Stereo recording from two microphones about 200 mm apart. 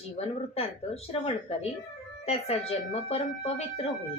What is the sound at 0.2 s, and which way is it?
Speech, 35° left (ahead or behind).